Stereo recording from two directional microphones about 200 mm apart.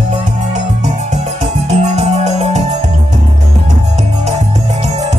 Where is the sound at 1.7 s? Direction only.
35° right (ahead or behind).